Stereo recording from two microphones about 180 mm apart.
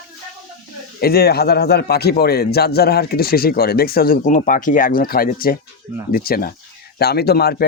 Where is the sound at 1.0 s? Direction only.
60° left (ahead or behind).